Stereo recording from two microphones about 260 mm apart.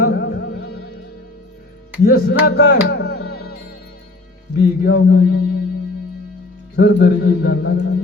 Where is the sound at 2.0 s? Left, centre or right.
Left.